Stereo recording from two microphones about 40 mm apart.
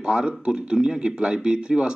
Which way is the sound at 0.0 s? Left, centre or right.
Right.